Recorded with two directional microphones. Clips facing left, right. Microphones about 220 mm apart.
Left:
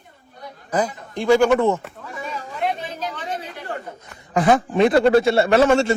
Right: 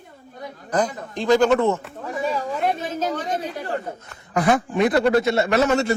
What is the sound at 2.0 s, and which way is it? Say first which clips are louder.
Chatter: right 9 dB; 40° right (ahead or behind).